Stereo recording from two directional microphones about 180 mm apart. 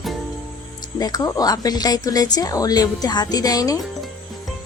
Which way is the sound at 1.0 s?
20° left (ahead or behind).